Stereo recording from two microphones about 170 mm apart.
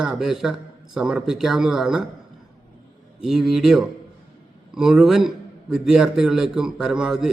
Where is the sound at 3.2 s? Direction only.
5° right (ahead or behind).